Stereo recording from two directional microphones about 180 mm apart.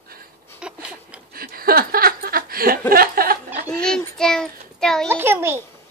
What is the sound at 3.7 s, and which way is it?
Child singing, 5° left (ahead or behind).